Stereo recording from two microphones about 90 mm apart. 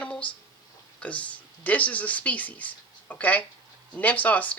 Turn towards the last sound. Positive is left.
turn(degrees=20)  # may be behind; listen again after turning